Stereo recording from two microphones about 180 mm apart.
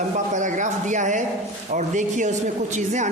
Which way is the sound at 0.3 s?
45° right (ahead or behind).